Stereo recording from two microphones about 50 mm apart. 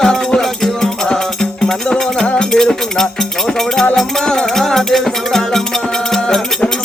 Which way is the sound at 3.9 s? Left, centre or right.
Centre.